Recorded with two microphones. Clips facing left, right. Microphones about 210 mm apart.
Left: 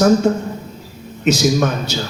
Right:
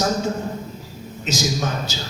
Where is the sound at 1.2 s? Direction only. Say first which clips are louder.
Left 9 dB; 60° left (ahead or behind).